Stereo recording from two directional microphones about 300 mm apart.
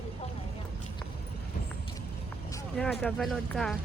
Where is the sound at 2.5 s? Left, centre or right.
Centre.